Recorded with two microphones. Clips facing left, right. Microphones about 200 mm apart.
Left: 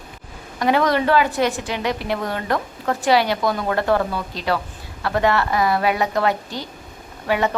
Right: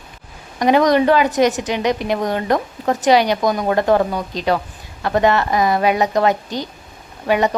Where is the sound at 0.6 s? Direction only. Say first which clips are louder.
Right 5 dB; 20° right (ahead or behind).